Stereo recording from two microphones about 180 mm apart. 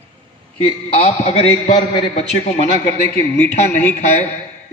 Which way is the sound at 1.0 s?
35° left (ahead or behind).